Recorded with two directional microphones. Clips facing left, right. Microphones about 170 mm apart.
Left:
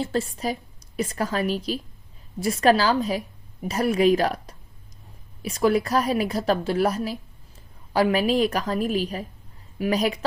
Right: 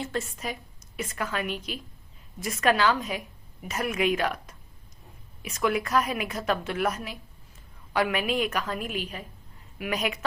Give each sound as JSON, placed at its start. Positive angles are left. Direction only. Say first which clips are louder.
{"t": 0.0, "sound": "a woman's voice", "louder": "left 6 dB", "side_deg": 35}